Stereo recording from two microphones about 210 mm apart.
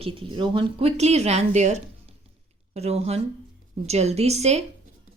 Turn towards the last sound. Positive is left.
turn(degrees=-30)  # may be behind; listen again after turning